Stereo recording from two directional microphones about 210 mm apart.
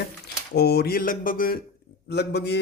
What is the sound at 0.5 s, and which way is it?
A man's voice, 50° left (ahead or behind).